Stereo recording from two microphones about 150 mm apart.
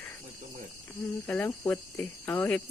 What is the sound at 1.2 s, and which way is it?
Speech, 10° left (ahead or behind).